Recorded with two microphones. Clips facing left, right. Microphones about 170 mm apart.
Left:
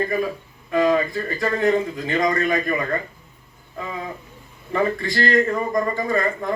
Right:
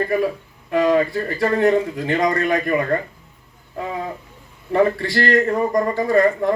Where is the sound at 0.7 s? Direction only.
65° right (ahead or behind).